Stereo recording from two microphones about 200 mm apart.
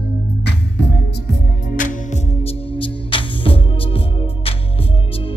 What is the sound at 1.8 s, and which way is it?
Music, 40° left (ahead or behind).